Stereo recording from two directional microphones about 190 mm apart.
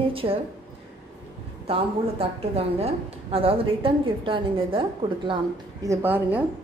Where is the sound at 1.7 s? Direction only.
30° right (ahead or behind).